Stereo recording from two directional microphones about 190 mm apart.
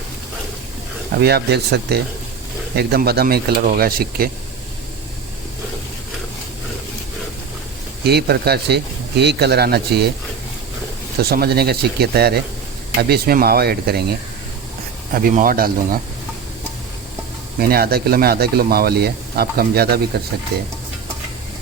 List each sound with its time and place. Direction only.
1.2 s speech: 60° right (ahead or behind)
8.0 s speech: 55° right (ahead or behind)
11.2 s speech: 55° right (ahead or behind)
15.1 s speech: 45° right (ahead or behind)
17.6 s speech: 55° right (ahead or behind)